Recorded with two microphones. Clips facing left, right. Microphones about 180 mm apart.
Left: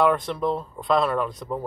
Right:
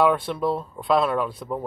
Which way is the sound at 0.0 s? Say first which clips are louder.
Right 1 dB; 5° right (ahead or behind).